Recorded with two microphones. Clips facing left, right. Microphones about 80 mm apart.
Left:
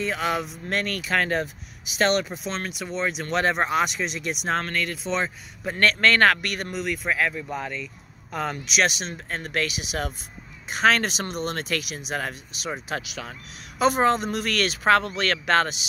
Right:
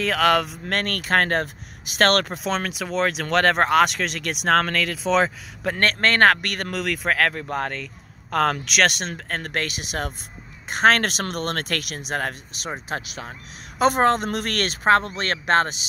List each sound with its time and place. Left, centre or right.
0.0 s speech: right
2.8 s speech: right
4.5 s speech: right
5.8 s speech: right
6.7 s speech: right
12.7 s speech: right
13.7 s speech: right